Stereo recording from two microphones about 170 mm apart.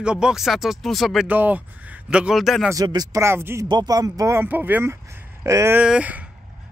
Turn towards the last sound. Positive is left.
turn(degrees=-10)  # may be behind; listen again after turning